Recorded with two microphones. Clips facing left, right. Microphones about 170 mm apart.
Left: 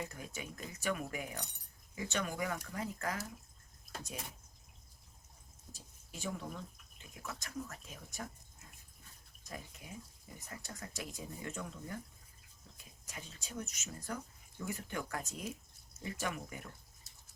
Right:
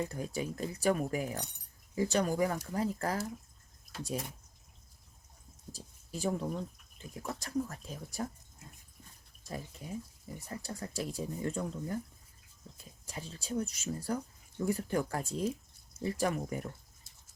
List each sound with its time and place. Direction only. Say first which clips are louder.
0.0 s speech: right 9 dB; 35° right (ahead or behind)
5.7 s speech: right 9 dB; 35° right (ahead or behind)
9.5 s speech: right 7 dB; 30° right (ahead or behind)